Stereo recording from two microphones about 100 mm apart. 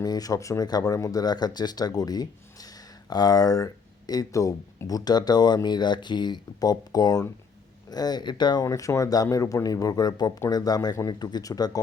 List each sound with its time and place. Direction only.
0.0 s speech: 40° left (ahead or behind)
8.6 s speech: 30° left (ahead or behind)